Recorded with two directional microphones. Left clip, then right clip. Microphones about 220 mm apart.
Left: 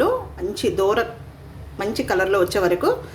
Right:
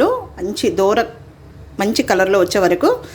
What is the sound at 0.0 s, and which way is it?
A woman's voice, 30° right (ahead or behind).